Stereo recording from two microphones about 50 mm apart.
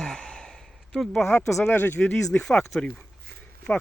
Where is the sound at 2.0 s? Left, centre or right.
Centre.